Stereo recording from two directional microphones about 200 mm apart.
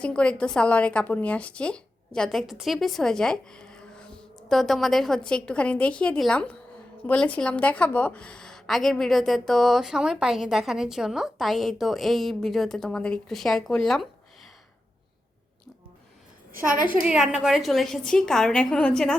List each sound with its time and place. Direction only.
0.0 s a woman's voice: 5° left (ahead or behind)
16.7 s a woman's voice: 45° right (ahead or behind)
17.0 s a woman's voice: 5° right (ahead or behind)